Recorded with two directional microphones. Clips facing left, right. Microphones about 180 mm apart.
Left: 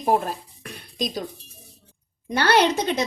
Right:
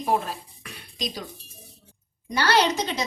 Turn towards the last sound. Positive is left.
turn(degrees=55)  # may be behind; listen again after turning